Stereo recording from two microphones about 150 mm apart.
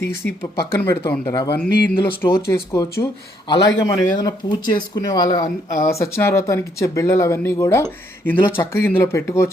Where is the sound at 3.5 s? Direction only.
30° left (ahead or behind).